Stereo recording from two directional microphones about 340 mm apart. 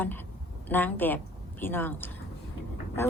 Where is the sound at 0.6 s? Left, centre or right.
Centre.